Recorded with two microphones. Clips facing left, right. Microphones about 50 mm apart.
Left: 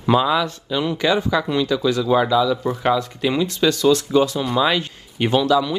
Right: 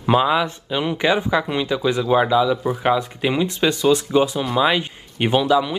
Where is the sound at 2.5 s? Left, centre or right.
Centre.